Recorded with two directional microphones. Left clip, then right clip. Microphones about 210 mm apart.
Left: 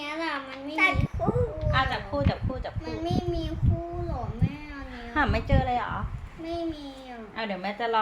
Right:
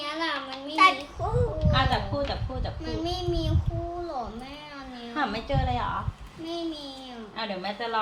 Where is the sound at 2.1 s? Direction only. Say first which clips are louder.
Left 1 dB; 45° left (ahead or behind).